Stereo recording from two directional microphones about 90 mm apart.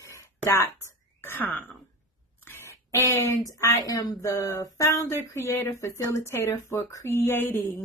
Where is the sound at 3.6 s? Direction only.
40° left (ahead or behind); by 7.8 s 25° left (ahead or behind).